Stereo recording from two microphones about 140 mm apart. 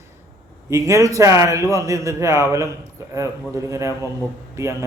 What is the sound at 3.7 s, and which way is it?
Speech, 20° right (ahead or behind).